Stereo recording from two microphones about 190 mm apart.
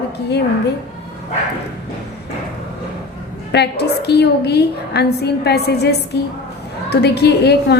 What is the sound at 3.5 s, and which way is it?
A woman's voice, 60° left (ahead or behind).